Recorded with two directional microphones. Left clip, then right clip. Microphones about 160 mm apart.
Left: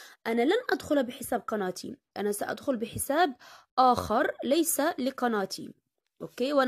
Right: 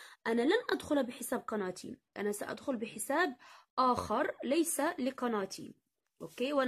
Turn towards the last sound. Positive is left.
turn(degrees=35)  # may be behind; listen again after turning